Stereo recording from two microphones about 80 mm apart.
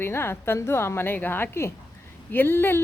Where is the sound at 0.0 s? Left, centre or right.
Left.